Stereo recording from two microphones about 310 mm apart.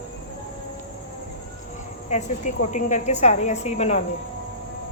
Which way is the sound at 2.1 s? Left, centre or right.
Left.